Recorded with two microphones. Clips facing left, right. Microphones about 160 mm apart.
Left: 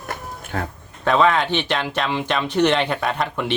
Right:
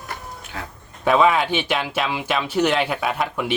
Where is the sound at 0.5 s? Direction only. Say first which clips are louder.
Left 8 dB; 55° left (ahead or behind).